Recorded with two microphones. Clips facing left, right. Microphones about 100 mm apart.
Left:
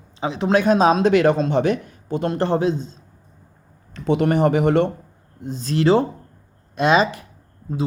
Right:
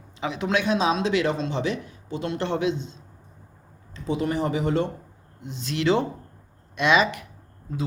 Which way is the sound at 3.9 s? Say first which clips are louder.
Left 7 dB; 65° left (ahead or behind).